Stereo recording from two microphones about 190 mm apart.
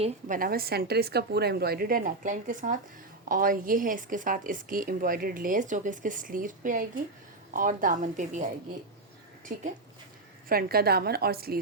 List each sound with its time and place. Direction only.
0.0 s a woman's voice: 45° right (ahead or behind)
9.5 s a woman's voice: 45° right (ahead or behind)